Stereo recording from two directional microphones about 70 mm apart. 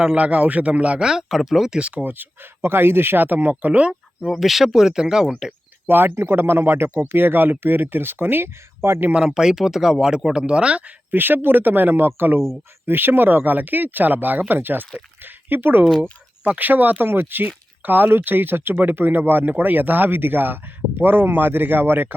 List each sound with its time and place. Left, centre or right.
0.0 s speech: centre
2.0 s speech: right
4.3 s speech: centre
5.5 s speech: right
9.0 s speech: centre
11.1 s speech: right